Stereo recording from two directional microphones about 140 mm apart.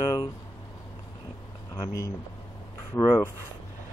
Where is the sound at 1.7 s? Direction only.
25° left (ahead or behind).